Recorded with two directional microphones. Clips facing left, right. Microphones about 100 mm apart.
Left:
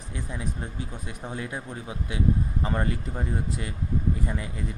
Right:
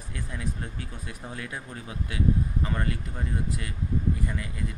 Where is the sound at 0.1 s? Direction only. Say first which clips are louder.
Left 1 dB; 20° left (ahead or behind).